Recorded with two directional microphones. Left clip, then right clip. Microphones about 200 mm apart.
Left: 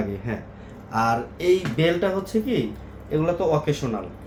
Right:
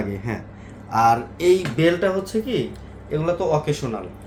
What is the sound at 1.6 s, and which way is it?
Speech, 20° right (ahead or behind).